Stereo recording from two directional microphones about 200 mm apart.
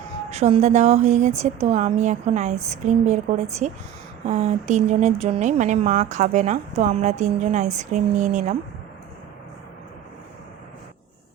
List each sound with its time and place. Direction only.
0.3 s speech: 35° right (ahead or behind)